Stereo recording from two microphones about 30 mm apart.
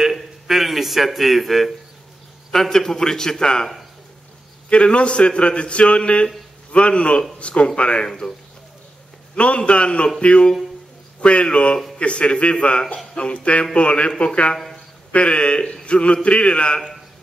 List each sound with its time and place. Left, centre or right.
0.0 s a sound: centre
2.5 s a man's voice: centre; by 3.6 s left
4.6 s a man's voice: left
9.3 s a man's voice: left